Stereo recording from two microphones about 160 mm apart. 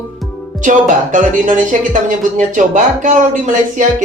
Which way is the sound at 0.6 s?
55° right (ahead or behind).